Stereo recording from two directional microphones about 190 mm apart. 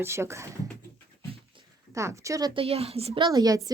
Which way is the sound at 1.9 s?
15° right (ahead or behind).